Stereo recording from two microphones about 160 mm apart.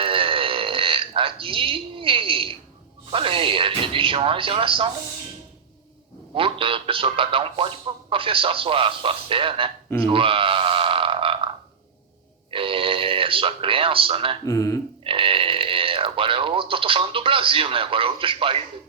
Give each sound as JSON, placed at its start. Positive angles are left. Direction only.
{"t": 0.0, "sound": "burping", "side_deg": -35}
{"t": 3.1, "sound": "speech", "side_deg": -35}
{"t": 6.3, "sound": "speech", "side_deg": -35}
{"t": 12.5, "sound": "speech", "side_deg": -35}
{"t": 14.4, "sound": "speech", "side_deg": 20}
{"t": 15.0, "sound": "speech", "side_deg": -35}